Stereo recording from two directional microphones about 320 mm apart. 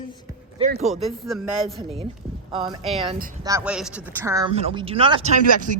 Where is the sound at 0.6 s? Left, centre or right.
Right.